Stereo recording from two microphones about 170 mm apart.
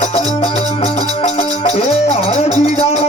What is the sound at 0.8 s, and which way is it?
Music, 40° left (ahead or behind).